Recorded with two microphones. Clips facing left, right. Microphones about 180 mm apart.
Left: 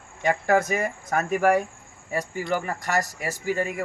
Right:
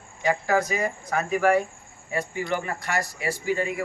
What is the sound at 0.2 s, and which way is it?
Speech, 55° left (ahead or behind).